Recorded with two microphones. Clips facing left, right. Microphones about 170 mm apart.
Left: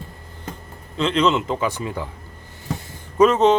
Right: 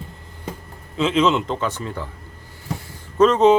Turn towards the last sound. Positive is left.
turn(degrees=10)  # may be behind; listen again after turning